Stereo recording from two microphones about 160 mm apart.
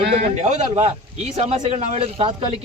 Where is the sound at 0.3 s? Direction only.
45° right (ahead or behind).